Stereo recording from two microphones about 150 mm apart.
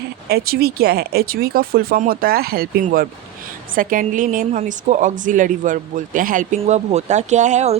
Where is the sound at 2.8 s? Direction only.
75° right (ahead or behind).